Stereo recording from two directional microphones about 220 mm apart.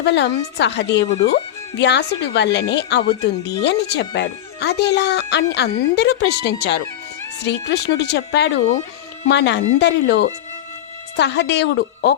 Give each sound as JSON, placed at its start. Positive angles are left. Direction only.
{"t": 0.0, "sound": "speech", "side_deg": 50}